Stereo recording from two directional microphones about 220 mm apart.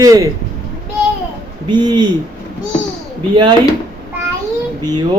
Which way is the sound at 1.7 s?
20° right (ahead or behind).